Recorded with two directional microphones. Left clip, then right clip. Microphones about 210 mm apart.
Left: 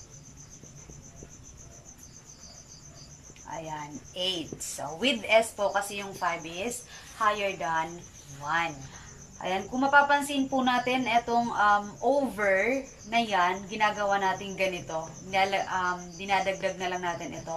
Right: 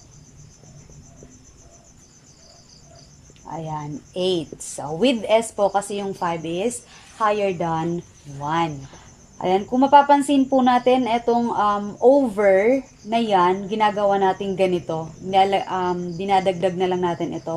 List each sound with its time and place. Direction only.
3.4 s a woman's voice: 25° right (ahead or behind)